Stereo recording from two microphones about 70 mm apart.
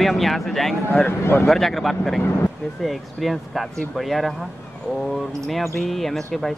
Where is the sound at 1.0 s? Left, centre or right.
Left.